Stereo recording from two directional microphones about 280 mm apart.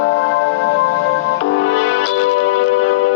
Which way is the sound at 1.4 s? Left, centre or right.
Left.